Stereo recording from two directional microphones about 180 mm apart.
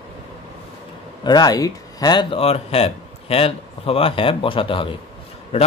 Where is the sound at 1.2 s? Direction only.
25° left (ahead or behind).